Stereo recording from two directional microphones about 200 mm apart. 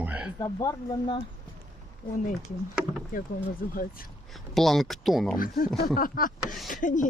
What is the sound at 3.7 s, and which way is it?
Speech, 45° left (ahead or behind).